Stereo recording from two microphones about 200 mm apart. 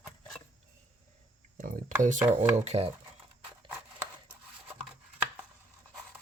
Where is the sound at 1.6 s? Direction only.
40° right (ahead or behind).